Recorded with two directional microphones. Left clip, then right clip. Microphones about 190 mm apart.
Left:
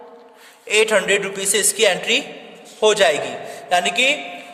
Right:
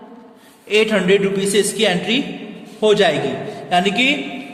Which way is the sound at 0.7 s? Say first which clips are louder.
Right 1 dB; 35° left (ahead or behind).